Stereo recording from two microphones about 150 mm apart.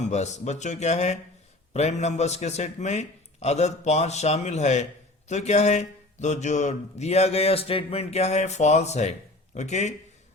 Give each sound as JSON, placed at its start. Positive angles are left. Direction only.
{"t": 0.0, "sound": "speech", "side_deg": 50}